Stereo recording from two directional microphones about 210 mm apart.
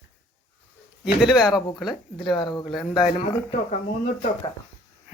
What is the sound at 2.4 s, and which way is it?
Speech, 20° left (ahead or behind).